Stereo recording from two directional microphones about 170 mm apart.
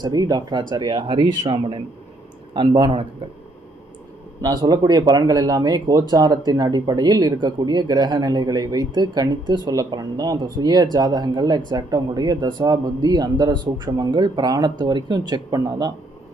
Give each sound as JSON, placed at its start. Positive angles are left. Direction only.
{"t": 0.0, "sound": "speech", "side_deg": -20}
{"t": 4.4, "sound": "speech", "side_deg": -25}